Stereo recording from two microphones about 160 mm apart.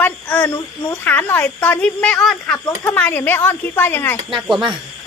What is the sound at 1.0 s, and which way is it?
Speech, 10° left (ahead or behind).